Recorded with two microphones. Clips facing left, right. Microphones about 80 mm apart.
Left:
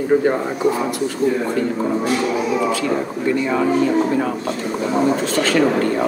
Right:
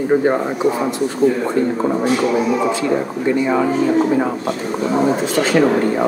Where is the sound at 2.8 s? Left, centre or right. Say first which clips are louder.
Right 2 dB; centre.